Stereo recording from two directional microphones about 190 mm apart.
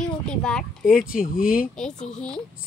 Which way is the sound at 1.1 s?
45° left (ahead or behind).